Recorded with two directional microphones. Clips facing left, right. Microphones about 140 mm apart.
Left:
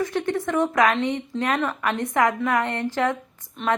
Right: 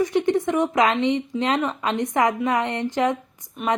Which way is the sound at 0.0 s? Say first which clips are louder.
Right 4 dB; 15° right (ahead or behind).